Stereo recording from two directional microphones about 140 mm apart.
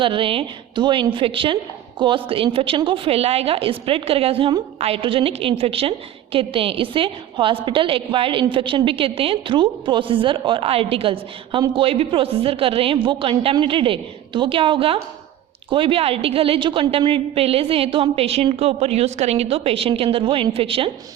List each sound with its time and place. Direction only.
0.0 s a woman's voice: 40° right (ahead or behind)